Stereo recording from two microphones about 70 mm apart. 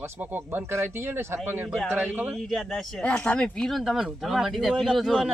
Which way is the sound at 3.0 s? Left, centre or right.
Centre.